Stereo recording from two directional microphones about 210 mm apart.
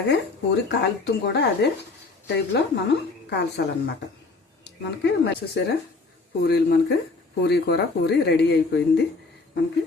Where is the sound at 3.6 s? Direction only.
55° left (ahead or behind).